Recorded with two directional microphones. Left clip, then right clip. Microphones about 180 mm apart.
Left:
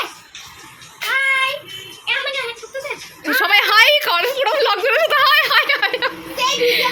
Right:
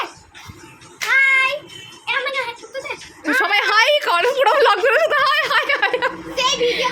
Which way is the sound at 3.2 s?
10° right (ahead or behind).